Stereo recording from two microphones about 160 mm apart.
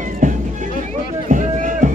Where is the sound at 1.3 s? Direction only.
50° right (ahead or behind).